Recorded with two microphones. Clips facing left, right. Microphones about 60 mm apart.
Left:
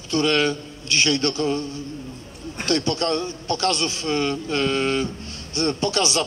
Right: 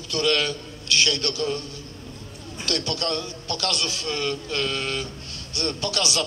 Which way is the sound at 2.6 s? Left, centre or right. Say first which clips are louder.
Left 5 dB; left.